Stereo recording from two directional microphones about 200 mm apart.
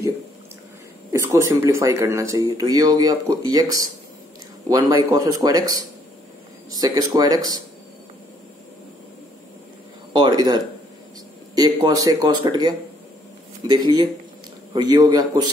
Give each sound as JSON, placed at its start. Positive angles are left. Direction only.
{"t": 1.1, "sound": "speech", "side_deg": -15}
{"t": 10.1, "sound": "speech", "side_deg": -20}